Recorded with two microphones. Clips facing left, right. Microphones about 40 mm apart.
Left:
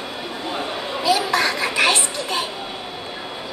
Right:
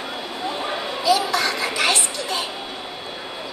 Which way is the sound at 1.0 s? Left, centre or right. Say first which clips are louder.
Left 1 dB; left.